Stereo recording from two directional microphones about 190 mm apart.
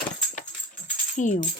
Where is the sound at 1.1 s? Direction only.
40° left (ahead or behind).